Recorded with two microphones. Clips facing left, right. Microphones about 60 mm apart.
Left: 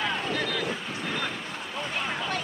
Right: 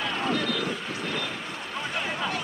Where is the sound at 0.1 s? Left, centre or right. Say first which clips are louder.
Right 2 dB; centre.